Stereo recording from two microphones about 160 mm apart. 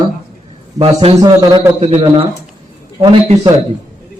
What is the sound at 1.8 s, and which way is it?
Speech, 40° right (ahead or behind).